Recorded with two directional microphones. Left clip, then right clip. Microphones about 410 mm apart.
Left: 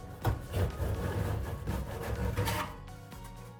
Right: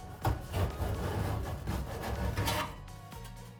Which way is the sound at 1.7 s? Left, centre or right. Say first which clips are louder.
Even; centre.